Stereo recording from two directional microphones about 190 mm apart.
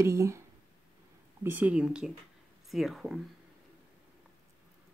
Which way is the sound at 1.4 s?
10° right (ahead or behind).